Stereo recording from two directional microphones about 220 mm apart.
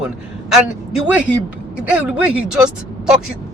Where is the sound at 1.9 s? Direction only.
5° right (ahead or behind).